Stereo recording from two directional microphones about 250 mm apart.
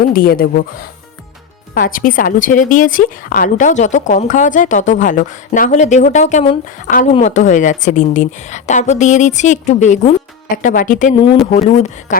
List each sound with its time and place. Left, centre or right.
0.0 s a woman's voice: left
11.1 s a woman's voice: centre